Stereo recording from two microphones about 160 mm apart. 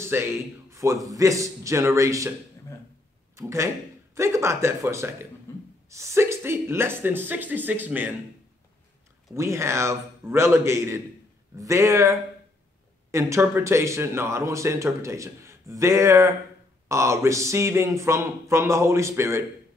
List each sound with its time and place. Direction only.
0.0 s a man's voice: 15° right (ahead or behind)
3.3 s speech: 20° right (ahead or behind)
9.3 s a man's voice: 15° right (ahead or behind)